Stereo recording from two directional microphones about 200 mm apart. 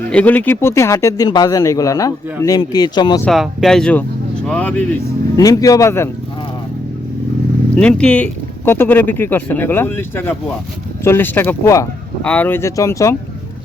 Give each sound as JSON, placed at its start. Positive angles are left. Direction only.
{"t": 0.1, "sound": "speech", "side_deg": 5}
{"t": 3.2, "sound": "speech", "side_deg": 0}
{"t": 7.8, "sound": "speech", "side_deg": 5}